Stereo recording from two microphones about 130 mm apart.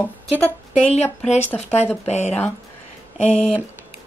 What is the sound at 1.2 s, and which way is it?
Speech, 60° left (ahead or behind).